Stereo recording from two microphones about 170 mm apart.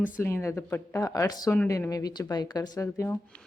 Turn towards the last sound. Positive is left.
turn(degrees=15)  # may be behind; listen again after turning